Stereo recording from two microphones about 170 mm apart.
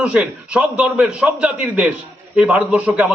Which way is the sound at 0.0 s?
5° right (ahead or behind).